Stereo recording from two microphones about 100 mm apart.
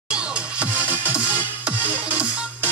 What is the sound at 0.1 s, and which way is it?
Music, 10° right (ahead or behind).